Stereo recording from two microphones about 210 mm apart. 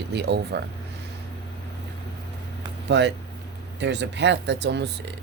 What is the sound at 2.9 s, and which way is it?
Speech, 55° right (ahead or behind).